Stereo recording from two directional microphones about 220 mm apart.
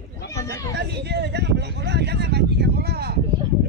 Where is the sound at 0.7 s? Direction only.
50° right (ahead or behind).